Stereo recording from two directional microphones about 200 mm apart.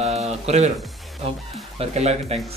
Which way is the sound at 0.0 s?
30° right (ahead or behind).